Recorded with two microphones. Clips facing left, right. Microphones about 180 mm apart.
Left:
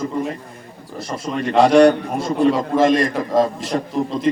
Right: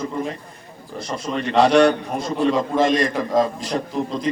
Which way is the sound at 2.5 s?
Centre (ahead or behind).